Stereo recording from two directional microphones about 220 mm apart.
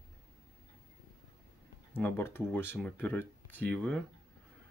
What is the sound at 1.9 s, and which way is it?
Speech, 10° left (ahead or behind).